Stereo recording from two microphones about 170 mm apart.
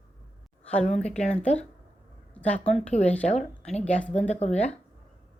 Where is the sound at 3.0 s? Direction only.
10° left (ahead or behind).